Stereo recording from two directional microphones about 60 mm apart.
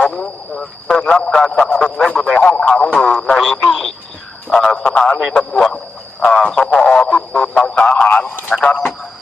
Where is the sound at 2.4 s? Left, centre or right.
Centre.